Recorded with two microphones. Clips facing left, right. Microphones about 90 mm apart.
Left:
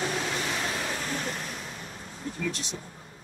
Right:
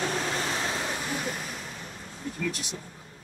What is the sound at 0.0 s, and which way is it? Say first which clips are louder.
Vehicle: right 1 dB; centre (ahead or behind).